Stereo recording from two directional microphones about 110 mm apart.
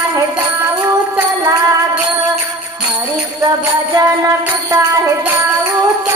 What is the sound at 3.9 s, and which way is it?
Music, 35° right (ahead or behind).